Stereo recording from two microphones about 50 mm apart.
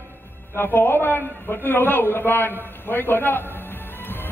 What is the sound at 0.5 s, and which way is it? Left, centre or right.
A man's voice, left.